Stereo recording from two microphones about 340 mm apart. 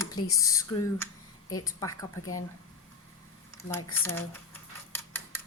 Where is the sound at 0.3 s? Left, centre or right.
Centre.